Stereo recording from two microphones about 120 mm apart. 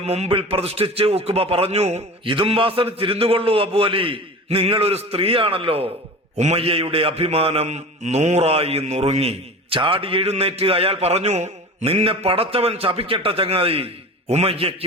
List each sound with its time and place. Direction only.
0.0 s a man's voice: 60° right (ahead or behind)
2.2 s a man's voice: 45° right (ahead or behind)
6.3 s a man's voice: 65° right (ahead or behind); by 14.8 s 50° right (ahead or behind)